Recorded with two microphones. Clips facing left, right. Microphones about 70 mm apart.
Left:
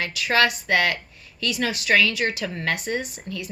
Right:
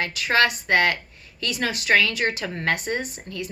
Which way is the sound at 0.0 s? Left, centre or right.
Right.